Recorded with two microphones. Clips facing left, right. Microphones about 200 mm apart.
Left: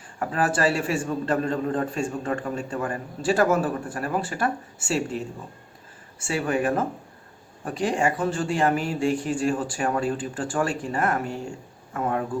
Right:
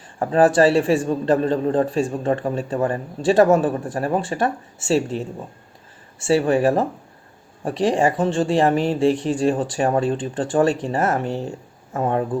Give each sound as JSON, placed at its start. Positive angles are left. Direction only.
{"t": 0.2, "sound": "a man's voice", "side_deg": -30}
{"t": 6.2, "sound": "a man's voice", "side_deg": -30}